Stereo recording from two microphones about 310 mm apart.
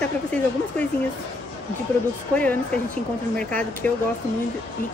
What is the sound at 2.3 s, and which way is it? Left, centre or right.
Speech, centre.